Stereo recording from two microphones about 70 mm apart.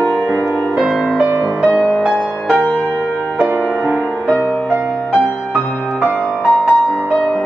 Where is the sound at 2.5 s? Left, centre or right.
Centre.